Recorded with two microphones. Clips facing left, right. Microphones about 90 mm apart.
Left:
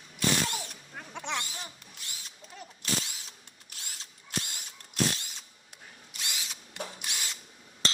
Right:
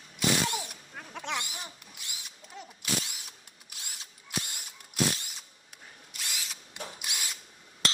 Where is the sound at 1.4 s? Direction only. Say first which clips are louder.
Even; 15° right (ahead or behind).